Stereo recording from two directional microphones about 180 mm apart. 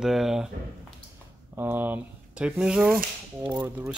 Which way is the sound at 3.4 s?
20° right (ahead or behind).